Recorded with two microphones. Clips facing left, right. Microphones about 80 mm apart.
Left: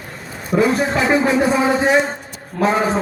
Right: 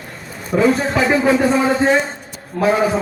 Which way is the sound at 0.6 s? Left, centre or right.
Centre.